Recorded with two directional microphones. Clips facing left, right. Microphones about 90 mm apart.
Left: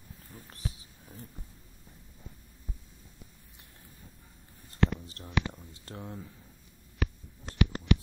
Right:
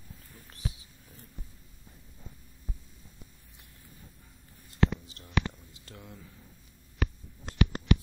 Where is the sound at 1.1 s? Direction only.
30° left (ahead or behind).